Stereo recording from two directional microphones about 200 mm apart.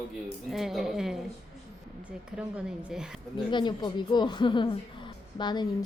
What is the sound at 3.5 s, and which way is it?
Speech, 20° left (ahead or behind).